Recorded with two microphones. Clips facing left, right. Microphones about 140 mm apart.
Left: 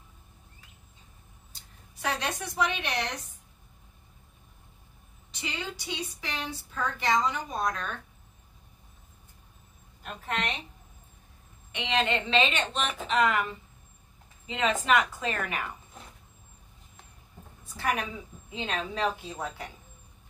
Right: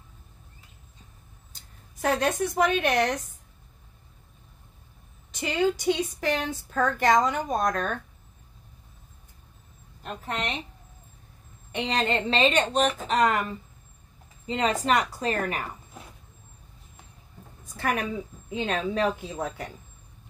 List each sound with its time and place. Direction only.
1.5 s speech: 50° right (ahead or behind)
5.3 s speech: 50° right (ahead or behind)
11.7 s a woman's voice: 40° right (ahead or behind)
17.6 s a woman's voice: 50° right (ahead or behind)